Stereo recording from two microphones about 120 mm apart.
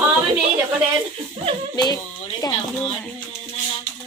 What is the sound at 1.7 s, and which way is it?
Speech, 35° left (ahead or behind).